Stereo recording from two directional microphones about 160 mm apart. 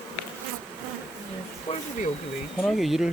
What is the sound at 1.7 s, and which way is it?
Speech, 50° left (ahead or behind).